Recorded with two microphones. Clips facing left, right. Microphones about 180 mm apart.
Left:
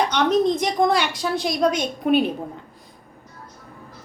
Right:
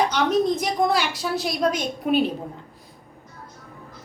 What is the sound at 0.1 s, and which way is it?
A woman's voice, 5° right (ahead or behind).